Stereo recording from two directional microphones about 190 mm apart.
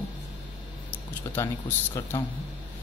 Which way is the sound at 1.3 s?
15° left (ahead or behind).